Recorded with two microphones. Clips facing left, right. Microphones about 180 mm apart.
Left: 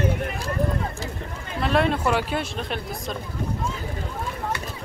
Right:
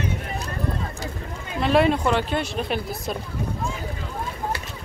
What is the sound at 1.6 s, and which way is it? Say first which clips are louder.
Speech: right 3 dB; centre (ahead or behind).